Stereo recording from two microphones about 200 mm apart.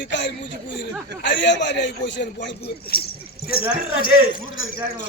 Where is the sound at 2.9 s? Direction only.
50° left (ahead or behind).